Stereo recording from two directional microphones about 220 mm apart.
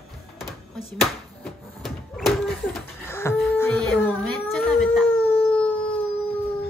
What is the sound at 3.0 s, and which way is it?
Beatboxing, 10° left (ahead or behind).